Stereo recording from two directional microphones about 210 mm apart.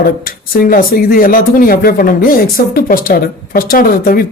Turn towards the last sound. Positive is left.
turn(degrees=45)  # may be behind; listen again after turning